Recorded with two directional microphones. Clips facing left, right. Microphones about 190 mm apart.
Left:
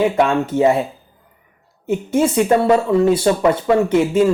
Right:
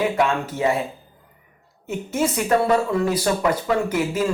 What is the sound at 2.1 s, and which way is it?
Speech, 30° left (ahead or behind).